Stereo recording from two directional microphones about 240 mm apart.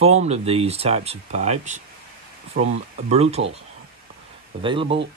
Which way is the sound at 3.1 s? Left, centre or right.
Right.